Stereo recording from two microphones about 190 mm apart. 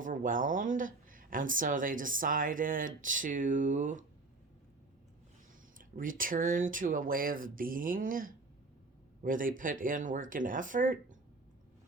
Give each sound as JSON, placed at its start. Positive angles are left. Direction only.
{"t": 0.0, "sound": "speech", "side_deg": -45}
{"t": 6.0, "sound": "speech", "side_deg": -45}